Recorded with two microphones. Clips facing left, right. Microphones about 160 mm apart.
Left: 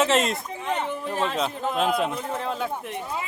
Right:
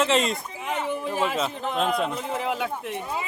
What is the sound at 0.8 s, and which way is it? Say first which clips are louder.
A man's voice: right 1 dB; 10° right (ahead or behind).